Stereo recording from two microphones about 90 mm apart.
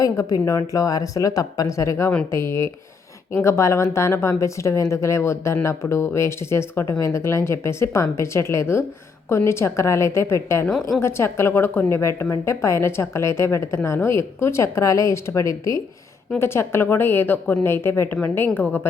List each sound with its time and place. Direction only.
0.0 s a woman's voice: 40° left (ahead or behind); by 18.6 s 20° left (ahead or behind)